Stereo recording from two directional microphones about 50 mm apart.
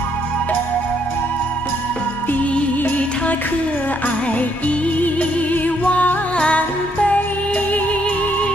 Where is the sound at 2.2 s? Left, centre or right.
Left.